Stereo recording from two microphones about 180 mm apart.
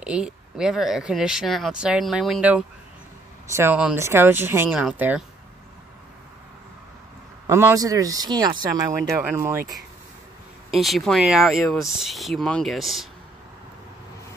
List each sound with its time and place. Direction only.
0.0 s speech: 5° right (ahead or behind)
7.4 s speech: 15° right (ahead or behind)
10.7 s speech: centre (ahead or behind)